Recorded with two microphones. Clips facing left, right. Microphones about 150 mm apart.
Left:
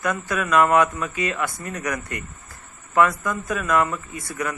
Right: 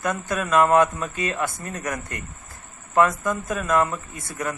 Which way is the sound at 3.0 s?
20° right (ahead or behind).